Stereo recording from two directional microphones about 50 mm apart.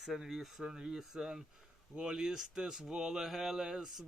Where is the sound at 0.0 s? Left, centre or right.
Centre.